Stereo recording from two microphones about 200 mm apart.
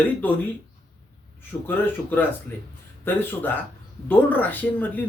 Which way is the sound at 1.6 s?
10° left (ahead or behind).